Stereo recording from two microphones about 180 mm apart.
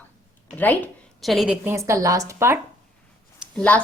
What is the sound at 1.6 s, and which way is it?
Speech, 15° right (ahead or behind).